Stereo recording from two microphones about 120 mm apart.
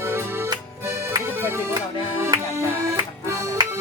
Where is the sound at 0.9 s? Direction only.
20° right (ahead or behind).